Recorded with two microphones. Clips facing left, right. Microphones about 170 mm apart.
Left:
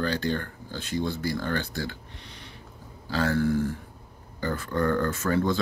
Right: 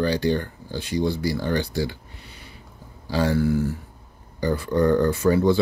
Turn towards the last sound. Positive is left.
turn(degrees=-10)  # may be behind; listen again after turning